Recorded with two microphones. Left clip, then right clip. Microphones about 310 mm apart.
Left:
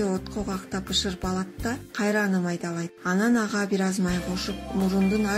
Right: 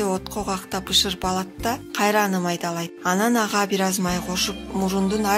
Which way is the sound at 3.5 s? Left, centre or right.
Centre.